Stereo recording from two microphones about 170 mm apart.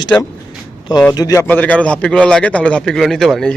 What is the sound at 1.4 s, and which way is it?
A man's voice, 10° left (ahead or behind).